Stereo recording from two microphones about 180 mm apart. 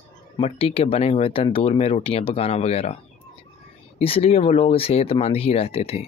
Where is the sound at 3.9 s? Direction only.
30° left (ahead or behind).